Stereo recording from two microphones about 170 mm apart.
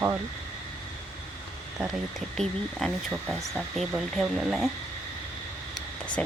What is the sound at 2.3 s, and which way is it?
Speech, centre (ahead or behind).